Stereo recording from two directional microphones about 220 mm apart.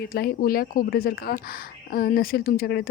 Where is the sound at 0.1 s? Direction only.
45° left (ahead or behind).